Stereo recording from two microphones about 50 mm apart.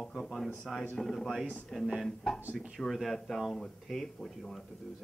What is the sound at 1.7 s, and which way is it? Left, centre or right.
Speech, centre.